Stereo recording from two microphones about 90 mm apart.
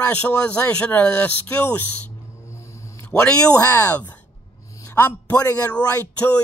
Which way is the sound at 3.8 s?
20° left (ahead or behind).